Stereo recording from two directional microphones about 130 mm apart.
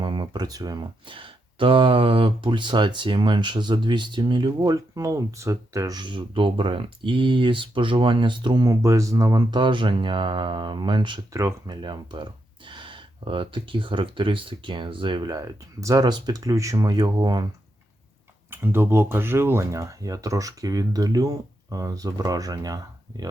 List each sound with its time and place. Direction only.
0.0 s speech: 35° right (ahead or behind)
11.3 s speech: 20° right (ahead or behind)
11.7 s speech: 35° right (ahead or behind)
18.5 s speech: 15° right (ahead or behind)